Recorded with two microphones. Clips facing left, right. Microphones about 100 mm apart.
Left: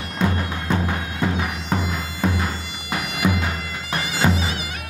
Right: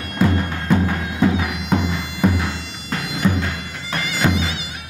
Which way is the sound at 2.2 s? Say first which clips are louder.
Right 4 dB; centre (ahead or behind).